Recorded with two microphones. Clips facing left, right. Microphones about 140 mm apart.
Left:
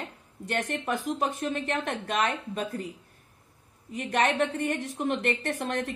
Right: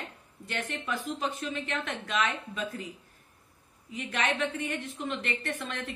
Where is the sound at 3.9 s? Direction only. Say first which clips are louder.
Left 5 dB; 55° left (ahead or behind).